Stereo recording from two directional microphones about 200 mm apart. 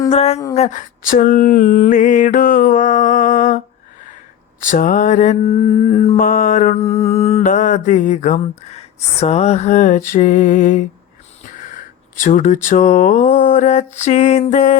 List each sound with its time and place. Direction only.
0.1 s speech: 30° left (ahead or behind)
0.5 s mantra: 35° left (ahead or behind)
4.6 s mantra: 40° left (ahead or behind)
12.1 s mantra: 40° left (ahead or behind)